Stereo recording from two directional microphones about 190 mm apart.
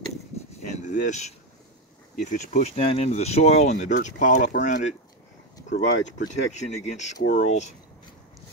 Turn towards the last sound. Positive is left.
turn(degrees=40)  # may be behind; listen again after turning